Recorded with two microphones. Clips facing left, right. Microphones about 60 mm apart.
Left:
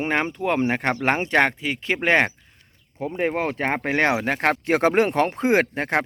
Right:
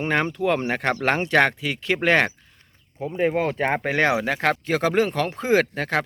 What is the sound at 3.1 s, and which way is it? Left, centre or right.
Speech, left.